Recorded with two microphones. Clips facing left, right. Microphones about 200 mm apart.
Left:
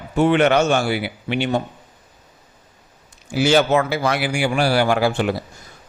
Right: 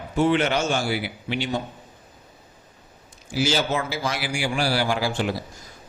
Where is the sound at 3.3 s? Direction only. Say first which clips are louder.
Left 7 dB; 60° left (ahead or behind).